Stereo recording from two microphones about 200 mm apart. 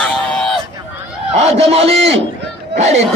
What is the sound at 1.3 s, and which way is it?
Speech, 30° right (ahead or behind).